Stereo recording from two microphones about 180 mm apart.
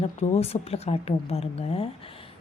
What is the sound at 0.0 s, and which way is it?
Speech, 35° left (ahead or behind).